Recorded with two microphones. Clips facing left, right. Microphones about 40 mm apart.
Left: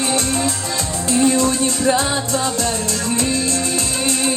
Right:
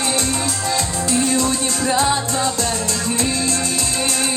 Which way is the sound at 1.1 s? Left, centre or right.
Left.